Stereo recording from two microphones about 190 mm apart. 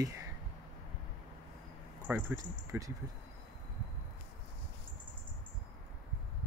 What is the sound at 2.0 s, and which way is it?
Speech, 10° right (ahead or behind).